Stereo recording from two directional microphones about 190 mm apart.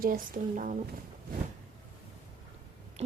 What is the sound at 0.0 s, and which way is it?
Speech, 45° right (ahead or behind).